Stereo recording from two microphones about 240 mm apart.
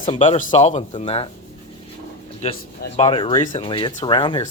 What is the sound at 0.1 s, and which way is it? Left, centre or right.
Speech, left.